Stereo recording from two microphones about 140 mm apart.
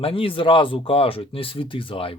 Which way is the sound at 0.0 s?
40° left (ahead or behind).